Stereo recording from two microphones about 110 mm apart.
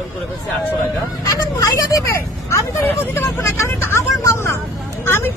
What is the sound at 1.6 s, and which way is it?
Speech, 25° left (ahead or behind).